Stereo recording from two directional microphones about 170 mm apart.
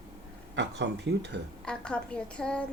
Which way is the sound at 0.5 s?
90° right.